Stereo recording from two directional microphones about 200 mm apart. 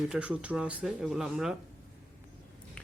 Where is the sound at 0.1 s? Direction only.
5° right (ahead or behind).